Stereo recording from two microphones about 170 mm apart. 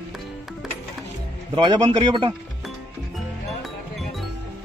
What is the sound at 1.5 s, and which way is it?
Speech, 30° right (ahead or behind).